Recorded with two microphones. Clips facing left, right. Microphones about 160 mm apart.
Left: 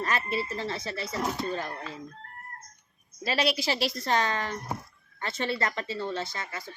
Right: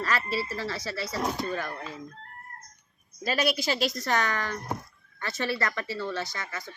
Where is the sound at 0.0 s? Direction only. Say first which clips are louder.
Even; 20° left (ahead or behind).